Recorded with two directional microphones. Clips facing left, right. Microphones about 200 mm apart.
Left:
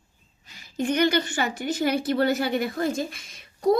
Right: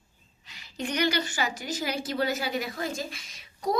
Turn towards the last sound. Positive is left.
turn(degrees=55)  # may be behind; listen again after turning